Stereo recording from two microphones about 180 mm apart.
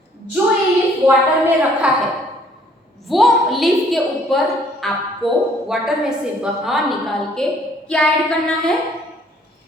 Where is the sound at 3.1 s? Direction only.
Centre (ahead or behind).